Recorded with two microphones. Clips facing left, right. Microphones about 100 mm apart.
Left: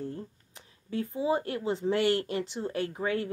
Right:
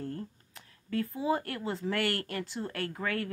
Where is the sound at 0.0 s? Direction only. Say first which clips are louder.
Left 1 dB; 20° left (ahead or behind).